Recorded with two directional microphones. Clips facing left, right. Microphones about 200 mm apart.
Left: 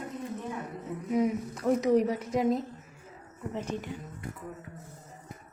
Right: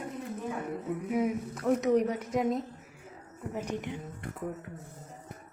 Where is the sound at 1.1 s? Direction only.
5° right (ahead or behind).